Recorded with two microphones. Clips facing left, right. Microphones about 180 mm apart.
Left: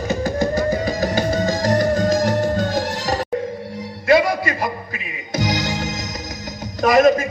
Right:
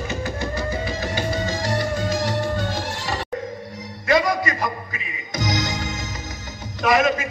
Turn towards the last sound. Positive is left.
turn(degrees=40)  # may be behind; listen again after turning